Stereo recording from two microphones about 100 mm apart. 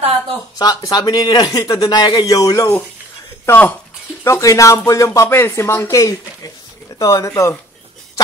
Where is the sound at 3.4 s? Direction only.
15° left (ahead or behind).